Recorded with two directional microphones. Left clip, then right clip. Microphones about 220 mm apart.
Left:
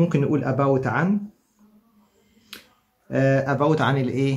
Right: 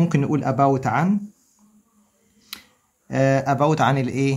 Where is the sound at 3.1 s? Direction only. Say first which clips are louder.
Right 1 dB; 50° right (ahead or behind).